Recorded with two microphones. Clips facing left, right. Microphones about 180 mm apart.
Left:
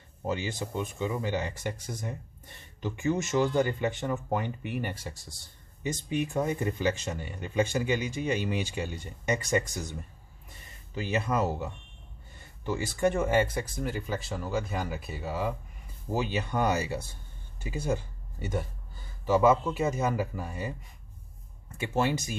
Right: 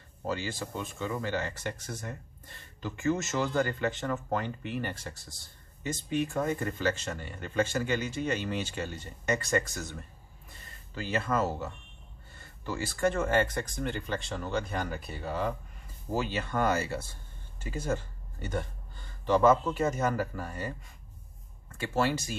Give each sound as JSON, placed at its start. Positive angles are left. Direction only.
{"t": 0.3, "sound": "speech", "side_deg": 20}
{"t": 21.7, "sound": "speech", "side_deg": 20}